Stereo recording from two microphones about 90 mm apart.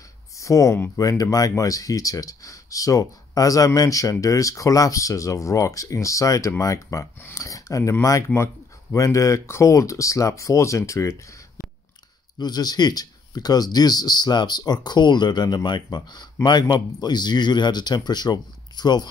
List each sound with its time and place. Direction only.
0.4 s speech: 35° left (ahead or behind)
12.4 s speech: 50° left (ahead or behind)